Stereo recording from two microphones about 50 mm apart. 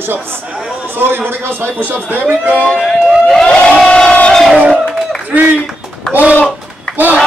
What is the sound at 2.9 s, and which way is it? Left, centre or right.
Speech, centre.